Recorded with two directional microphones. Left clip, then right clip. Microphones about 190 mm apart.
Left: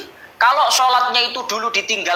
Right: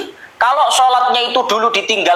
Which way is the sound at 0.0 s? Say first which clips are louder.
Even; 10° left (ahead or behind).